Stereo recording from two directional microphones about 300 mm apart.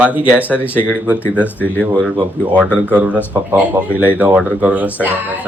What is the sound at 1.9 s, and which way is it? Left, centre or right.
Speech, centre.